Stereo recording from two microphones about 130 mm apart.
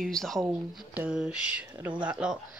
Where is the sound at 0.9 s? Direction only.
10° right (ahead or behind).